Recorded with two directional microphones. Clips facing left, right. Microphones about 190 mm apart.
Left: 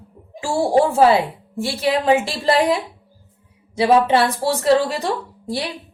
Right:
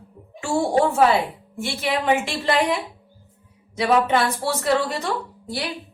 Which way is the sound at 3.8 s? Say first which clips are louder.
Left 4 dB; 30° left (ahead or behind).